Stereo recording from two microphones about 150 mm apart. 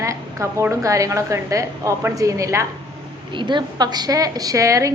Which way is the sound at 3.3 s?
30° right (ahead or behind).